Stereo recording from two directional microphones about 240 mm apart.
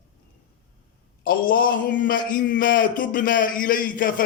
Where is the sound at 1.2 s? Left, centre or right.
Left.